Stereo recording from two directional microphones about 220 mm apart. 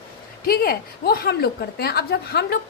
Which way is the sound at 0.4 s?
40° left (ahead or behind).